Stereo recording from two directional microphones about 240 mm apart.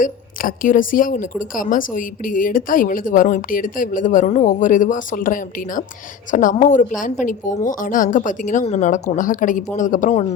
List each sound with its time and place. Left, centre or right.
0.0 s a woman's voice: left